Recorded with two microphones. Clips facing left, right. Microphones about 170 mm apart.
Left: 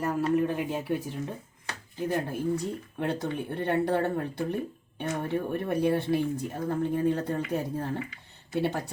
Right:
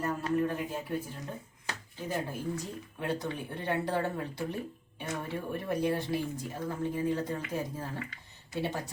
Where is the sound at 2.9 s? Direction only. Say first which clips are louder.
Left 3 dB; 60° left (ahead or behind).